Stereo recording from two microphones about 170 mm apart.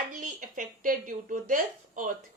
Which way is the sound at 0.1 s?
50° right (ahead or behind).